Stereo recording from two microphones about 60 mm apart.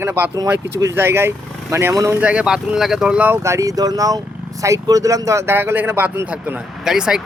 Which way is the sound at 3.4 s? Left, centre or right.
Right.